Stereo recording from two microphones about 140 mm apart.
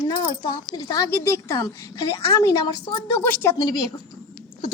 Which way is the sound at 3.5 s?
30° left (ahead or behind).